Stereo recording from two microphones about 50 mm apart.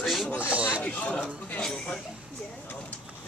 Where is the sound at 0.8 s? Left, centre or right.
Left.